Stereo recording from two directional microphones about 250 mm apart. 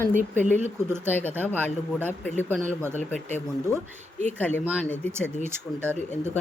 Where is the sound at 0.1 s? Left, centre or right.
Right.